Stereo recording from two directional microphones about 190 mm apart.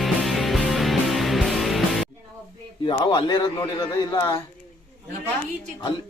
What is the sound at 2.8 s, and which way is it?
A man's voice, 25° left (ahead or behind).